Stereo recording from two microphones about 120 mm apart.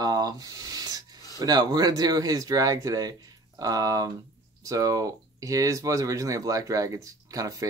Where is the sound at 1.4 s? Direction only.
35° right (ahead or behind).